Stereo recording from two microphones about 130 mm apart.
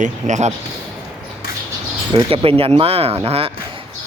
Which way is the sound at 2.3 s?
45° right (ahead or behind).